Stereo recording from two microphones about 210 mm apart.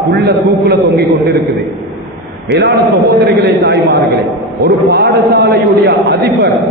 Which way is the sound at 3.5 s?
55° right (ahead or behind).